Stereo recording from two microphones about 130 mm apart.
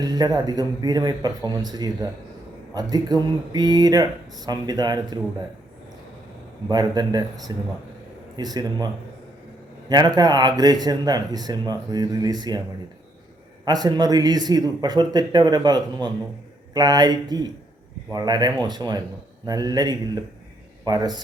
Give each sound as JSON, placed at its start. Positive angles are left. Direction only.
{"t": 0.0, "sound": "speech", "side_deg": -30}
{"t": 6.7, "sound": "speech", "side_deg": -30}
{"t": 9.9, "sound": "speech", "side_deg": -30}
{"t": 13.7, "sound": "speech", "side_deg": -30}